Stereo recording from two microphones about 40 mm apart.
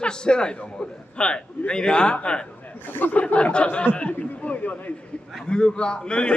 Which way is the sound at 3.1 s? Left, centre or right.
Left.